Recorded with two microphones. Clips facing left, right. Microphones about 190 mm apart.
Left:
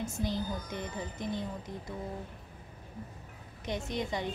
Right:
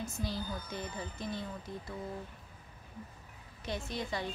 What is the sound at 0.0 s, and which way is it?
Speech, 20° left (ahead or behind).